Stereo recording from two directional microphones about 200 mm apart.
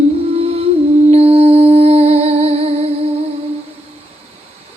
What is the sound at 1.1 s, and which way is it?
Humming, 30° right (ahead or behind).